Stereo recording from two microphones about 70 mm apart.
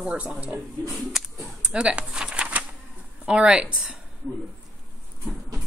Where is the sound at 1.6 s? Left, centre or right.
Centre.